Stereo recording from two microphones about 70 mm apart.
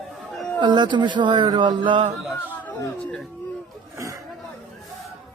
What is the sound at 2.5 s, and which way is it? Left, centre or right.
Speech, left.